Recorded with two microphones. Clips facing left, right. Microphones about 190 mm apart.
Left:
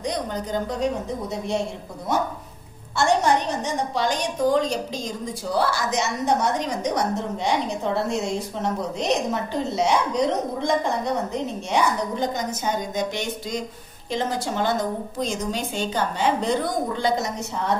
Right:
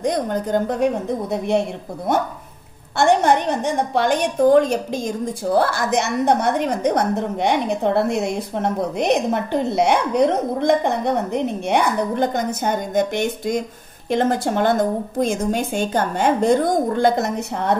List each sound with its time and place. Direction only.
0.0 s a woman's voice: 55° right (ahead or behind)
3.0 s a woman's voice: 60° right (ahead or behind)